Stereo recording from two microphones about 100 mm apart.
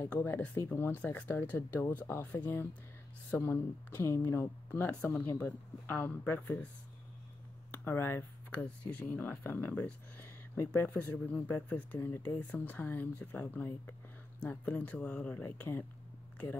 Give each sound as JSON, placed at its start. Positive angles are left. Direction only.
{"t": 0.0, "sound": "speech", "side_deg": 20}
{"t": 7.7, "sound": "a sound", "side_deg": 20}
{"t": 8.6, "sound": "speech", "side_deg": 15}